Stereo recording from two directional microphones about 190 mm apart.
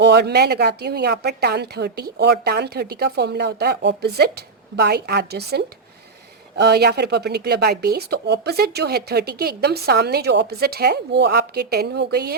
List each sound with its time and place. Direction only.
0.0 s speech: 60° right (ahead or behind)